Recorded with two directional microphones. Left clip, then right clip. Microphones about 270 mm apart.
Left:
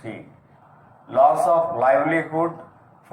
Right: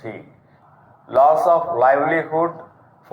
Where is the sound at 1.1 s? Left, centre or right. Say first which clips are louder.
Right 2 dB; right.